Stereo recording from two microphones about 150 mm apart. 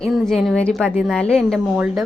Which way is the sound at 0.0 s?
5° left (ahead or behind).